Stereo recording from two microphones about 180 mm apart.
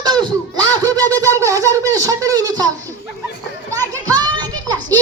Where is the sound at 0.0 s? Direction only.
25° right (ahead or behind).